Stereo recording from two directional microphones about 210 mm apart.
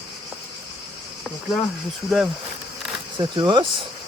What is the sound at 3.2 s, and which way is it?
Speech, 20° right (ahead or behind).